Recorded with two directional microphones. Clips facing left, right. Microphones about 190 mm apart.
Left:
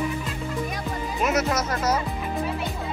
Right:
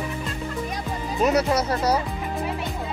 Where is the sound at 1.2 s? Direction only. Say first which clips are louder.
Right 4 dB; 35° right (ahead or behind).